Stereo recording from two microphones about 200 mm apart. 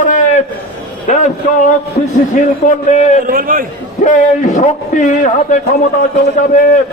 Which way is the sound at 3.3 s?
45° right (ahead or behind).